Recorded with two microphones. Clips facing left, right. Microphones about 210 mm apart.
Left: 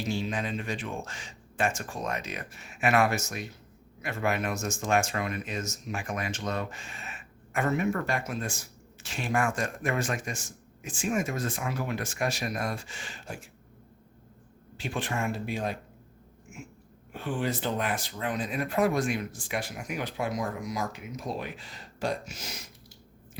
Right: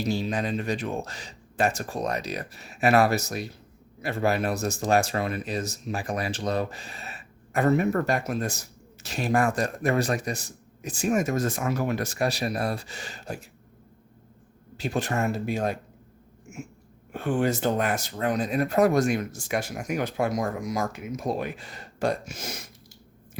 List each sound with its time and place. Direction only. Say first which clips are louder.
0.0 s speech: right 4 dB; 40° right (ahead or behind)
14.8 s speech: right 5 dB; 40° right (ahead or behind)
17.1 s speech: right 6 dB; 50° right (ahead or behind)